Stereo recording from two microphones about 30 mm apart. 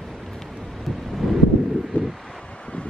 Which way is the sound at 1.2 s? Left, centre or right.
Centre.